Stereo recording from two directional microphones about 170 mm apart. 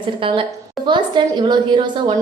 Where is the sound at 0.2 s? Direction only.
30° right (ahead or behind).